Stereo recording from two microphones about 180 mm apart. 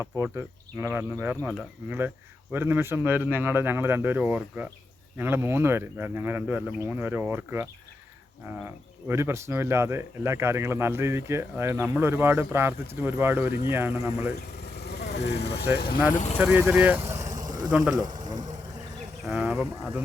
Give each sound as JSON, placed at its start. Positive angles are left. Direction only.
{"t": 0.0, "sound": "speech", "side_deg": -15}
{"t": 9.0, "sound": "speech", "side_deg": -15}
{"t": 14.8, "sound": "vehicle", "side_deg": 65}
{"t": 15.3, "sound": "speech", "side_deg": 65}
{"t": 16.4, "sound": "speech", "side_deg": -5}
{"t": 17.7, "sound": "speech", "side_deg": -5}
{"t": 18.0, "sound": "a sound", "side_deg": -20}
{"t": 19.2, "sound": "a sound", "side_deg": 0}